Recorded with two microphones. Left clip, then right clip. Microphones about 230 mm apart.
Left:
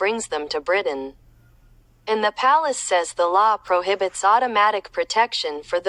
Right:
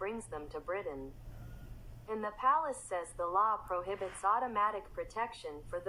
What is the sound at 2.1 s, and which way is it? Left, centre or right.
Speech, left.